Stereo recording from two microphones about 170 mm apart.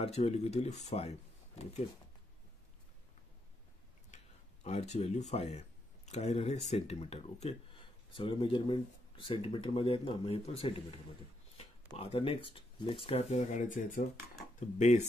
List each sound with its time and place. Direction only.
0.0 s speech: 40° left (ahead or behind)
4.6 s speech: 40° left (ahead or behind)